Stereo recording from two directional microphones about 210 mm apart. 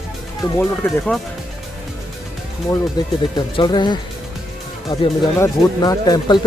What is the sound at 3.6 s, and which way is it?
Speech, 20° left (ahead or behind).